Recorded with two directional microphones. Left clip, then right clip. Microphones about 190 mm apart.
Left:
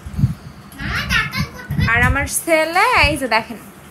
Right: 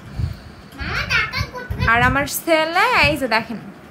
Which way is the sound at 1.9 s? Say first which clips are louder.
Right 1 dB; 10° right (ahead or behind).